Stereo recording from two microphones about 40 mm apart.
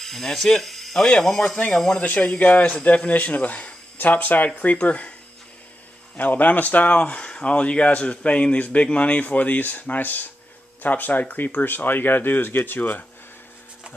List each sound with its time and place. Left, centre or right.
0.0 s speech: centre
2.0 s speech: left
4.7 s speech: left
6.1 s speech: left